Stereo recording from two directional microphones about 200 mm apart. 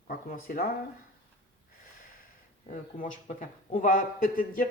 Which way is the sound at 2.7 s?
40° left (ahead or behind).